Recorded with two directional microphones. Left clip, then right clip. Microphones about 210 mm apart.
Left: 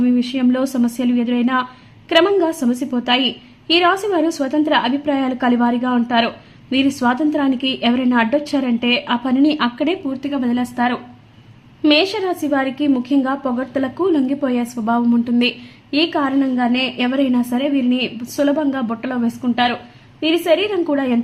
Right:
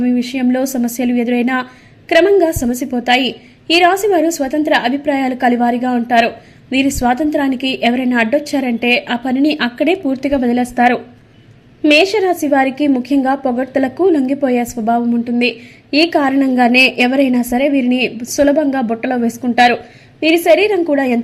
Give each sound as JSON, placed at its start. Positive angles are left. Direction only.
{"t": 0.0, "sound": "a woman's voice", "side_deg": 0}
{"t": 10.2, "sound": "a woman's voice", "side_deg": -20}
{"t": 16.0, "sound": "a woman's voice", "side_deg": -10}